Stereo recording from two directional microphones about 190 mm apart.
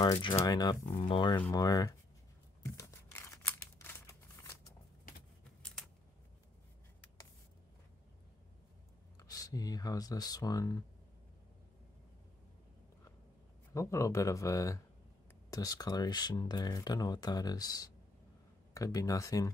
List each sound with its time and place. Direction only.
0.0 s speech: 25° left (ahead or behind)
2.6 s crumpling: 15° left (ahead or behind)
9.3 s speech: 20° left (ahead or behind)
13.7 s speech: 15° left (ahead or behind)